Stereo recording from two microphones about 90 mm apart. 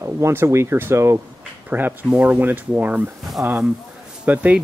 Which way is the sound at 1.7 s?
20° right (ahead or behind).